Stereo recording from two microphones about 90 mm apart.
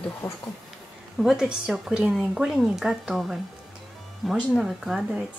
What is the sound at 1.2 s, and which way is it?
Speech, 5° right (ahead or behind).